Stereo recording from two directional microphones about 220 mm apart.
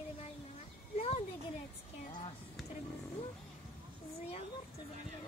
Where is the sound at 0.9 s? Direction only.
30° left (ahead or behind).